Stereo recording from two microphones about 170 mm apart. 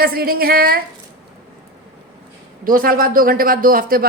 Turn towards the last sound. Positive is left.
turn(degrees=-55)  # may be behind; listen again after turning